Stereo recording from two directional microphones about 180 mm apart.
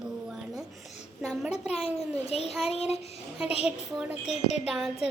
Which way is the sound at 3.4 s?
5° right (ahead or behind).